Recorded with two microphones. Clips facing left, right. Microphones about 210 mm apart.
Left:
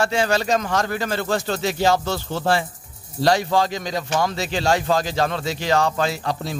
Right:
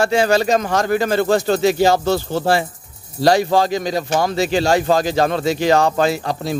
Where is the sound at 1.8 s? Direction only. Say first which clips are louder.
Right 5 dB; 40° right (ahead or behind).